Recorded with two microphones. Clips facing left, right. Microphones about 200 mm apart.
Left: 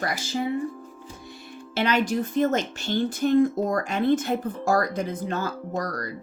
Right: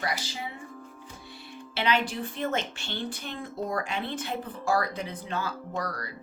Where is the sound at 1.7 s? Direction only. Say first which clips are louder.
Left 5 dB; 45° left (ahead or behind).